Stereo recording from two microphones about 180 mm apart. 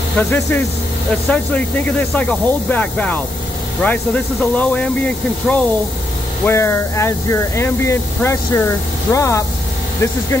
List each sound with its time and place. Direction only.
0.3 s speech: 10° left (ahead or behind)